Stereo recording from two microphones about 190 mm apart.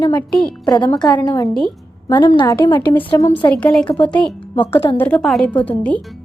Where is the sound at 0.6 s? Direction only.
20° left (ahead or behind).